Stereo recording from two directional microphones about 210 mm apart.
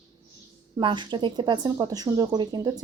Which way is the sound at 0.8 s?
20° right (ahead or behind).